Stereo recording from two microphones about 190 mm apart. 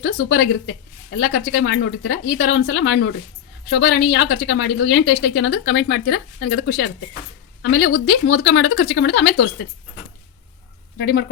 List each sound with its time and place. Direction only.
0.0 s a woman's voice: 65° left (ahead or behind)
10.9 s speech: 60° left (ahead or behind)